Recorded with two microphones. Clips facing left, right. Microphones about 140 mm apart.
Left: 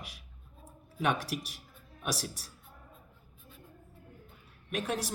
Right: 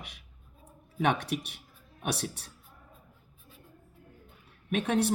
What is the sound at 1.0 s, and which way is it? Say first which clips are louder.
Speech: right 3 dB; 65° right (ahead or behind).